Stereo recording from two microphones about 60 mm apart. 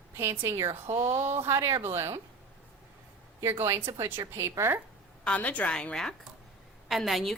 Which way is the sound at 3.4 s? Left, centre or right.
Right.